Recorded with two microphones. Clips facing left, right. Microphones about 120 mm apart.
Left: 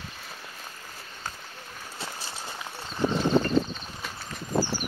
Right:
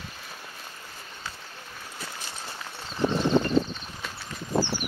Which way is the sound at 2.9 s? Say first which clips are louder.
Even; 5° left (ahead or behind).